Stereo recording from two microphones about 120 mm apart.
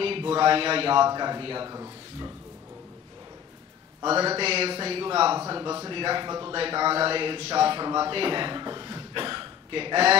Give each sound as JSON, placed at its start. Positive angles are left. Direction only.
{"t": 0.0, "sound": "a man's voice", "side_deg": -50}
{"t": 1.7, "sound": "speech", "side_deg": -30}
{"t": 4.0, "sound": "a man's voice", "side_deg": -50}
{"t": 5.5, "sound": "a man's voice", "side_deg": -35}
{"t": 6.5, "sound": "a man's voice", "side_deg": -45}